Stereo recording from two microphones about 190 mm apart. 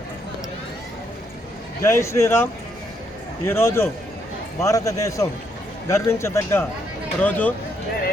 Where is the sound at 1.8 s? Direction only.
15° left (ahead or behind).